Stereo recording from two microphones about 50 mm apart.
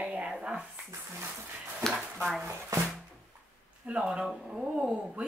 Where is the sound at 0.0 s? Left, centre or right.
Centre.